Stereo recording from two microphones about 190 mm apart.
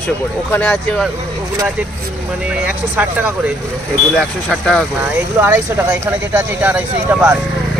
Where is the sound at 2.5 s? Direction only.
10° right (ahead or behind).